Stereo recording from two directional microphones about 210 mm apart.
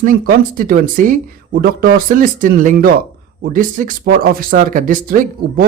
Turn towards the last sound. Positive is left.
turn(degrees=-40)  # may be behind; listen again after turning